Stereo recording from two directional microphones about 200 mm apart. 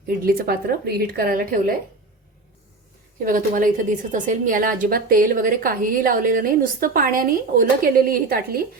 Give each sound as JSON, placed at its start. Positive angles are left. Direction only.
{"t": 0.3, "sound": "a woman's voice", "side_deg": -50}
{"t": 3.2, "sound": "a woman's voice", "side_deg": -45}